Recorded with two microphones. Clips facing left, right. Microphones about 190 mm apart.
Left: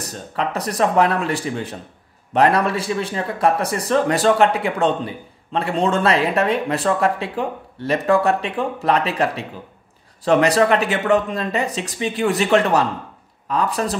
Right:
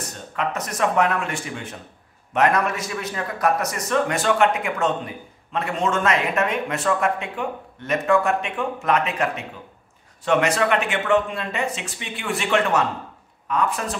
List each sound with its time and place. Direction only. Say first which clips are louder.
0.0 s speech: left 2 dB; 35° left (ahead or behind)